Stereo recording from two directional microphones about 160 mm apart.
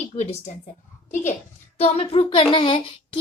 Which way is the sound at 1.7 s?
40° left (ahead or behind).